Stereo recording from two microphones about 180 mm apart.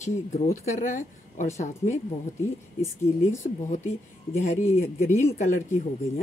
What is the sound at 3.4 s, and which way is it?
Speech, 40° left (ahead or behind).